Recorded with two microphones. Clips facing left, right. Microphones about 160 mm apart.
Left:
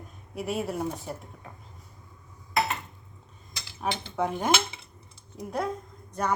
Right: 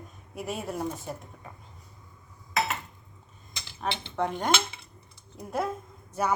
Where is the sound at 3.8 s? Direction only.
5° left (ahead or behind).